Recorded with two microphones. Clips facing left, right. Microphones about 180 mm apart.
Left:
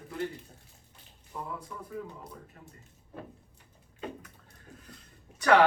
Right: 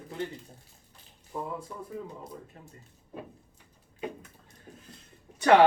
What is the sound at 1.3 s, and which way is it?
Speech, 25° right (ahead or behind).